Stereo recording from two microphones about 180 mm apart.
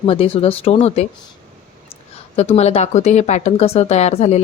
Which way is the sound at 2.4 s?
35° left (ahead or behind).